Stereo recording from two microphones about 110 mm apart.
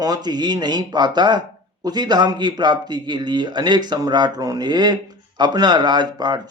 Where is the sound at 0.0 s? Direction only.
35° right (ahead or behind).